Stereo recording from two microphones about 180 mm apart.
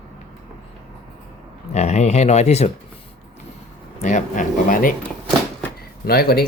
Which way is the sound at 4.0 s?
45° left (ahead or behind).